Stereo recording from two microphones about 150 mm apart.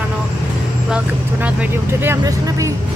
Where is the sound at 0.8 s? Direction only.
10° right (ahead or behind).